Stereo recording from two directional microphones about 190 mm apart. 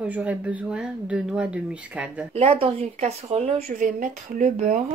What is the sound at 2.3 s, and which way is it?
A woman's voice, 30° right (ahead or behind).